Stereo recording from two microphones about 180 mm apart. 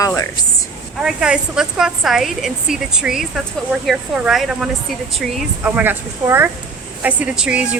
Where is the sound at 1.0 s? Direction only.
5° right (ahead or behind).